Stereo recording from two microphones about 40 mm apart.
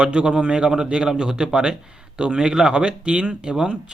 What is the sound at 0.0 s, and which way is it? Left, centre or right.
Speech, right.